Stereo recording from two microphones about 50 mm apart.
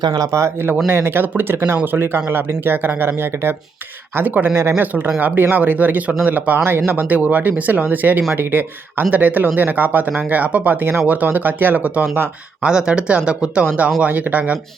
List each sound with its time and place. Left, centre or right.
0.3 s speech: right
0.9 s speech: right
4.1 s speech: right
11.0 s speech: right
12.6 s speech: centre
14.1 s speech: right